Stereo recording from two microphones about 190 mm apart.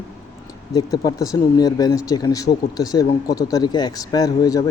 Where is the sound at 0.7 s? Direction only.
20° left (ahead or behind).